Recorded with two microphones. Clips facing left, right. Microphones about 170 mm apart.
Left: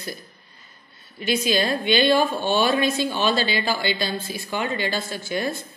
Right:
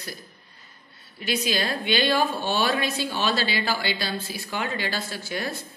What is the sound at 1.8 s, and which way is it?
Speech, 5° right (ahead or behind).